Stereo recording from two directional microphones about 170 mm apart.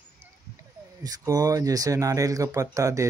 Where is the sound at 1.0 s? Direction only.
20° right (ahead or behind).